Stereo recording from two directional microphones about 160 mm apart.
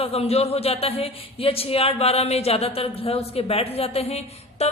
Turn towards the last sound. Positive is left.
turn(degrees=40)  # may be behind; listen again after turning